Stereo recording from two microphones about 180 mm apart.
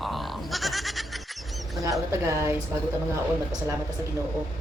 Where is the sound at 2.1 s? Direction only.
15° right (ahead or behind).